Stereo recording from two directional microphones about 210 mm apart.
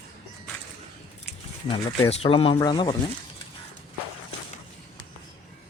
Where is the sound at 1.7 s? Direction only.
25° left (ahead or behind).